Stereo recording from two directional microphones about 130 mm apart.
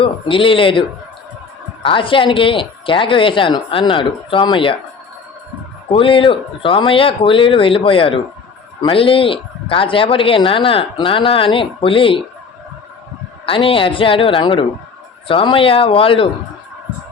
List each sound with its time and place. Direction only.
0.0 s speech: 40° left (ahead or behind)
5.9 s speech: 45° left (ahead or behind)
13.4 s speech: 45° left (ahead or behind)